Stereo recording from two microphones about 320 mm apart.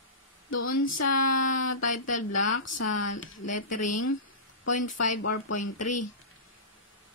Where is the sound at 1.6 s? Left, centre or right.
Left.